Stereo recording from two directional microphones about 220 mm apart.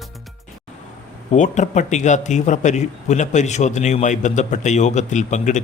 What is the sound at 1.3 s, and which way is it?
A man's voice, 30° left (ahead or behind).